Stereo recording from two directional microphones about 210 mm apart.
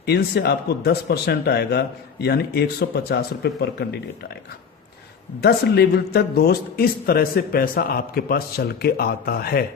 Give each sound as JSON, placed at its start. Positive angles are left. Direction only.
{"t": 0.0, "sound": "a man's voice", "side_deg": 50}
{"t": 5.4, "sound": "a man's voice", "side_deg": 50}